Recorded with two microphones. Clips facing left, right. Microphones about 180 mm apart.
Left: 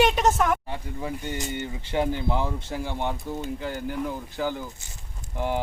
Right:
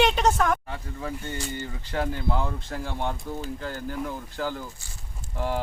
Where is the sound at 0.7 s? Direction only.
15° left (ahead or behind).